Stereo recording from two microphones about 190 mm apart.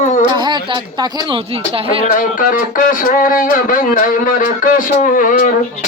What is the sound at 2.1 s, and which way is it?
Speech, 45° left (ahead or behind).